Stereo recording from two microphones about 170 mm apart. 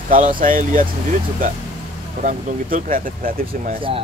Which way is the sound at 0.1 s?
55° right (ahead or behind).